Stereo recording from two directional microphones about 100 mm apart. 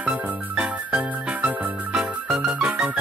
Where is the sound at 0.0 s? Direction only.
15° right (ahead or behind).